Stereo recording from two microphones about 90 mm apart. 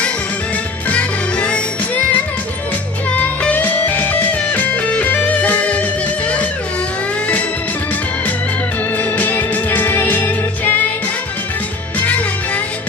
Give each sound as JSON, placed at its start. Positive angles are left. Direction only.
{"t": 0.9, "sound": "music", "side_deg": 15}
{"t": 3.2, "sound": "music", "side_deg": 15}
{"t": 9.0, "sound": "music", "side_deg": 20}
{"t": 11.9, "sound": "music", "side_deg": 15}